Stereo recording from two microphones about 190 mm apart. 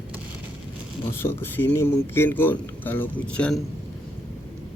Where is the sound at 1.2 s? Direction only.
10° left (ahead or behind).